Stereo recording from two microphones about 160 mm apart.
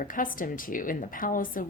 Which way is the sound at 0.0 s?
60° left (ahead or behind).